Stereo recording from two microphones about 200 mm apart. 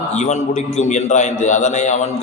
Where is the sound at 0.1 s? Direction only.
35° left (ahead or behind).